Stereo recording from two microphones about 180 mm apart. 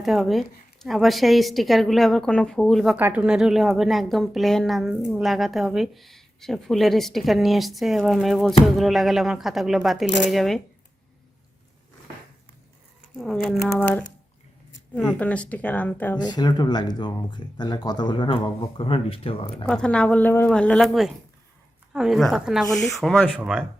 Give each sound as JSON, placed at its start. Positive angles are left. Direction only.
{"t": 0.0, "sound": "a woman's voice", "side_deg": 0}
{"t": 13.1, "sound": "a woman's voice", "side_deg": 0}
{"t": 14.9, "sound": "speech", "side_deg": 10}
{"t": 16.3, "sound": "speech", "side_deg": 25}
{"t": 19.6, "sound": "a woman's voice", "side_deg": 5}